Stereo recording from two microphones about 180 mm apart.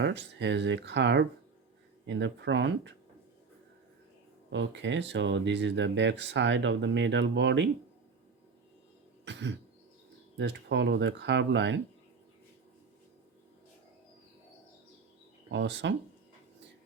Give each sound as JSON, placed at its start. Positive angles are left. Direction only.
{"t": 0.0, "sound": "speech", "side_deg": -75}
{"t": 4.5, "sound": "speech", "side_deg": -85}
{"t": 9.2, "sound": "throat clearing", "side_deg": -80}
{"t": 10.3, "sound": "speech", "side_deg": -75}
{"t": 15.4, "sound": "speech", "side_deg": -80}